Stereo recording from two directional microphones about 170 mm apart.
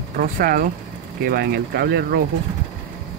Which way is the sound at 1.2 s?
70° right (ahead or behind).